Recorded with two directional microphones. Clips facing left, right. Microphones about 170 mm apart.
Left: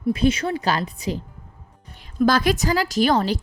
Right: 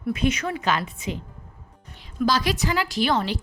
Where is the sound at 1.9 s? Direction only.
55° left (ahead or behind).